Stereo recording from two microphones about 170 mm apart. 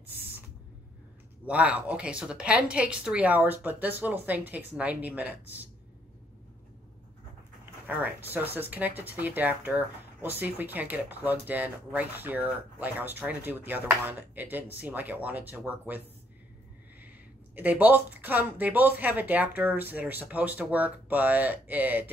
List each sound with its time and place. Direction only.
1.4 s speech: 5° right (ahead or behind)
7.6 s speech: 10° right (ahead or behind)
17.6 s speech: 10° right (ahead or behind)